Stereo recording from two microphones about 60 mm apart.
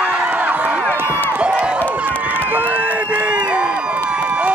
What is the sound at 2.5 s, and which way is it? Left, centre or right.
Crowd, right.